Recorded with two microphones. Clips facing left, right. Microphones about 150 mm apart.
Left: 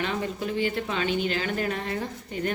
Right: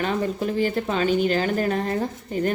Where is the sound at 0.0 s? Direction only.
40° right (ahead or behind).